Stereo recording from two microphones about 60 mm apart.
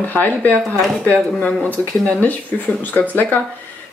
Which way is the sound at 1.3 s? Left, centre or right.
Left.